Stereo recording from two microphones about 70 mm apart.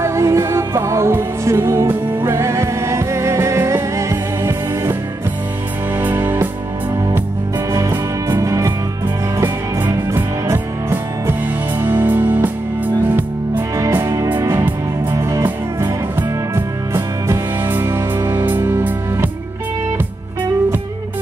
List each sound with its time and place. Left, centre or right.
0.0 s music: right
5.9 s music: right
8.4 s music: right
10.0 s music: right
14.0 s music: right
15.4 s music: right